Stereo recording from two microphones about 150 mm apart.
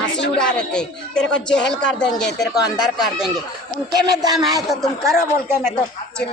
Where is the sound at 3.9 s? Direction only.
25° right (ahead or behind).